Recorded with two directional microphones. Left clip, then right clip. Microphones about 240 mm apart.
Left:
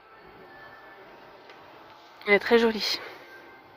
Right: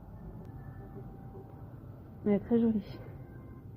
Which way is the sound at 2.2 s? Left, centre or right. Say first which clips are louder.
Left 10 dB; left.